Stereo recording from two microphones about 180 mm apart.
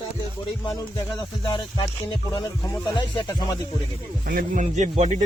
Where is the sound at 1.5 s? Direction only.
20° left (ahead or behind).